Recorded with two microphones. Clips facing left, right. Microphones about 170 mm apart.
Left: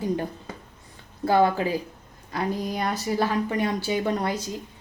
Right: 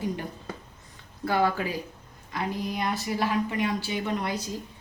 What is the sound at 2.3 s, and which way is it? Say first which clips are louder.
Speech: left 3 dB; 40° left (ahead or behind).